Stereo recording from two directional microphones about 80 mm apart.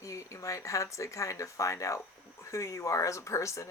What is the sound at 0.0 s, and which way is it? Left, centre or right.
Speech, left.